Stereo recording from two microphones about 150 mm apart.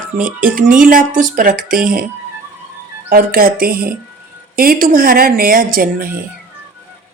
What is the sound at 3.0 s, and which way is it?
Speech, 75° right (ahead or behind).